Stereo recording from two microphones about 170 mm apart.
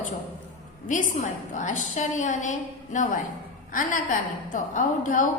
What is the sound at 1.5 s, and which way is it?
A woman's voice, 45° left (ahead or behind).